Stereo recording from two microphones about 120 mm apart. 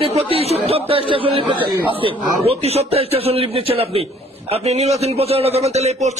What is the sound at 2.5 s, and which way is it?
A man's voice, 60° right (ahead or behind).